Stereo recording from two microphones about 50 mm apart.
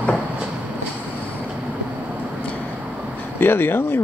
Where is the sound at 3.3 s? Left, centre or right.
Left.